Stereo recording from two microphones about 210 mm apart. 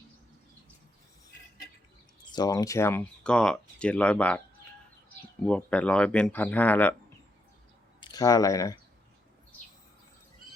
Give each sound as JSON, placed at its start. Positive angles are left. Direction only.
{"t": 2.3, "sound": "speech", "side_deg": 20}
{"t": 8.0, "sound": "speech", "side_deg": 15}